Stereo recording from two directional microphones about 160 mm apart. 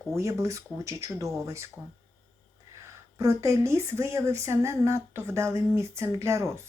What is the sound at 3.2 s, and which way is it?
Speech, 20° right (ahead or behind).